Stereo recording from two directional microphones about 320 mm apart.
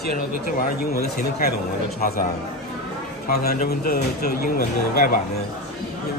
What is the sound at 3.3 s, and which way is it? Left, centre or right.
Speech, left.